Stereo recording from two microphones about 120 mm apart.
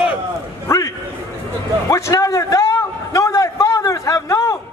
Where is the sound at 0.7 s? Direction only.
25° left (ahead or behind).